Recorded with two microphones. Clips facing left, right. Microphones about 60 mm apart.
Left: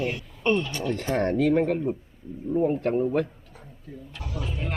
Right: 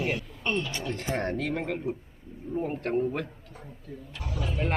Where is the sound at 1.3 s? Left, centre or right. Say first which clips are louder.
Left 8 dB; centre.